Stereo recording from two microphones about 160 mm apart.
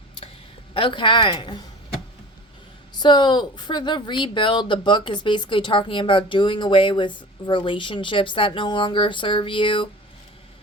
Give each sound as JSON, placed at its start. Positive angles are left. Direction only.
{"t": 0.7, "sound": "speech", "side_deg": 30}
{"t": 3.0, "sound": "speech", "side_deg": 25}